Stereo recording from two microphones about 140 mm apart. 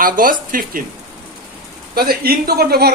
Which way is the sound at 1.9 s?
90° right.